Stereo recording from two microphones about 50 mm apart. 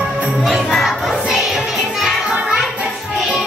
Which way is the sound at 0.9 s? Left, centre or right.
Centre.